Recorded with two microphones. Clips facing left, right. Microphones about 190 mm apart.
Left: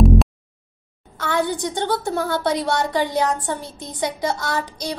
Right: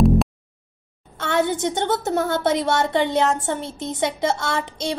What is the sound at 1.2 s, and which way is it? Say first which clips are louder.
A woman's voice: right 1 dB; 25° right (ahead or behind).